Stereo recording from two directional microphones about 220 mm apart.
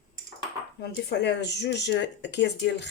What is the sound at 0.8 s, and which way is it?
Speech, 50° left (ahead or behind).